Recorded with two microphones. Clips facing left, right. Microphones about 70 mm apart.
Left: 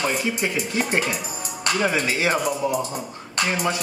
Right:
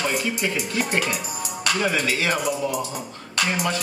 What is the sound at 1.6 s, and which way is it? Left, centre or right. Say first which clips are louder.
Speech: left 1 dB; left.